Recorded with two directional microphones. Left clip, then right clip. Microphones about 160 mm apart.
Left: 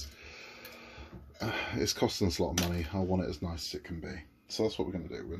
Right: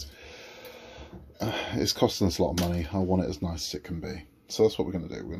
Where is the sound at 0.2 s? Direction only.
10° right (ahead or behind).